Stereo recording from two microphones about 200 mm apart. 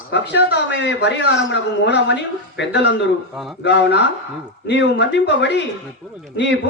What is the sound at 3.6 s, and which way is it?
A man's voice, 65° left (ahead or behind).